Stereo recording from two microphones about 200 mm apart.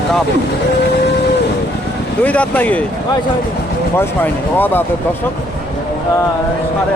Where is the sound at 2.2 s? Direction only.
5° left (ahead or behind).